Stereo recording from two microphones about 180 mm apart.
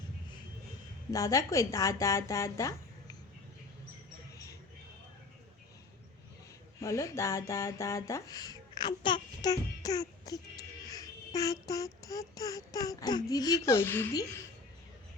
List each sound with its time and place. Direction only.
1.1 s speech: 20° left (ahead or behind)
6.7 s speech: 15° left (ahead or behind)
10.8 s a sound: 20° left (ahead or behind)